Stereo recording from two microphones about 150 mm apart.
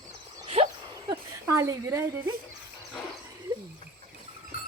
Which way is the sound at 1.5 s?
20° right (ahead or behind).